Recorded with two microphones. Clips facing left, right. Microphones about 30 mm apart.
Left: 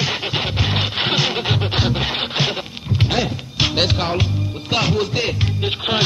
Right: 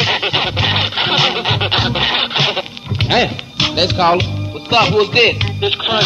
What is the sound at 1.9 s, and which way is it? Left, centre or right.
Music, right.